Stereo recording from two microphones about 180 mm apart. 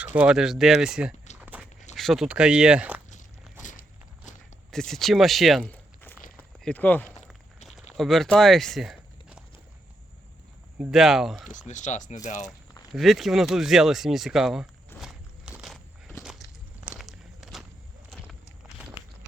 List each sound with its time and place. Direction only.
0.0 s speech: 10° right (ahead or behind)
1.4 s walk: 10° right (ahead or behind)
2.0 s speech: centre (ahead or behind)
3.6 s walk: 45° left (ahead or behind)
4.7 s speech: centre (ahead or behind)
6.3 s a sound: 5° left (ahead or behind)
10.8 s speech: centre (ahead or behind)
11.7 s speech: 40° left (ahead or behind)
12.9 s speech: centre (ahead or behind)
15.0 s walk: 5° right (ahead or behind)